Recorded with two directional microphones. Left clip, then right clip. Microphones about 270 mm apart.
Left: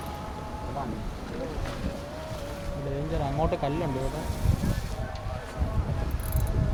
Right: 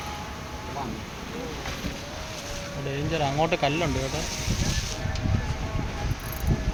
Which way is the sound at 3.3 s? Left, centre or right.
Centre.